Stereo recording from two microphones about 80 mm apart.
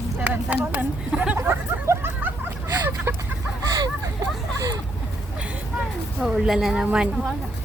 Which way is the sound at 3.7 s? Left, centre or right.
Right.